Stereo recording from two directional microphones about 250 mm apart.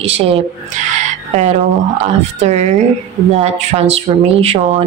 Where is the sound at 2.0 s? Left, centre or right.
Right.